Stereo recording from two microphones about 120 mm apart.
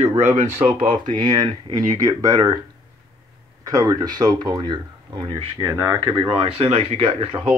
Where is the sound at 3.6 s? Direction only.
30° right (ahead or behind).